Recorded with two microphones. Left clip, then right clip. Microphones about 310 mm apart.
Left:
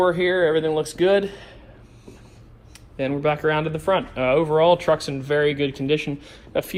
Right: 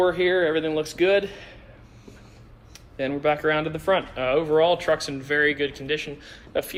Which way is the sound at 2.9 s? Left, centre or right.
Centre.